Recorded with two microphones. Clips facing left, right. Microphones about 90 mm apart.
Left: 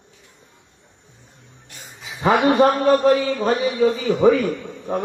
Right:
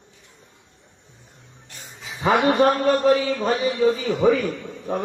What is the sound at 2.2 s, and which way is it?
A man's voice, centre (ahead or behind).